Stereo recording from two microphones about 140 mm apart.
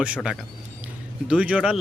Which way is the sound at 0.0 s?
5° right (ahead or behind).